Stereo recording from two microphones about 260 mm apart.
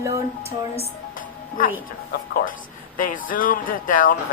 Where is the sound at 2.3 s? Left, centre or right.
Left.